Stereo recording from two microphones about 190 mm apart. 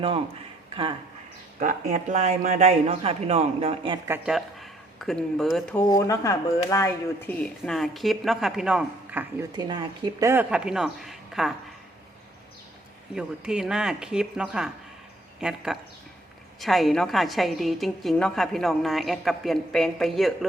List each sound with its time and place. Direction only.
0.7 s speech: 25° right (ahead or behind)
1.5 s speech: 45° right (ahead or behind)
4.0 s speech: 10° right (ahead or behind)
5.9 s a woman's voice: 15° left (ahead or behind); by 9.2 s 5° right (ahead or behind)
9.4 s speech: 20° right (ahead or behind); by 11.5 s centre (ahead or behind)
13.1 s a woman's voice: 5° right (ahead or behind)